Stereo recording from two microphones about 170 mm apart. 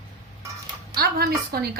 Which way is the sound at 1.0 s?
65° right (ahead or behind).